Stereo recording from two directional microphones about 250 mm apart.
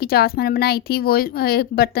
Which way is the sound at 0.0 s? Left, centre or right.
Left.